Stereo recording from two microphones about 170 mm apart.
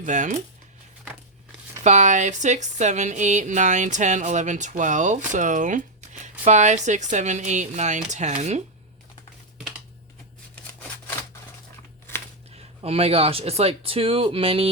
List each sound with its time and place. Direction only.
0.0 s speech: 45° right (ahead or behind)
1.8 s speech: 45° right (ahead or behind)
12.8 s speech: 35° right (ahead or behind)